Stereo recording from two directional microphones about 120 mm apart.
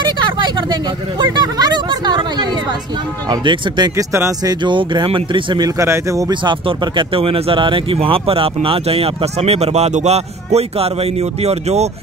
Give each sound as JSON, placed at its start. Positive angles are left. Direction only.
{"t": 0.0, "sound": "vehicle", "side_deg": -40}
{"t": 1.2, "sound": "a sound", "side_deg": -35}
{"t": 3.3, "sound": "speech", "side_deg": -35}
{"t": 3.9, "sound": "speech", "side_deg": -25}
{"t": 4.6, "sound": "speech", "side_deg": -40}
{"t": 5.8, "sound": "speech", "side_deg": -25}
{"t": 7.0, "sound": "speech", "side_deg": -50}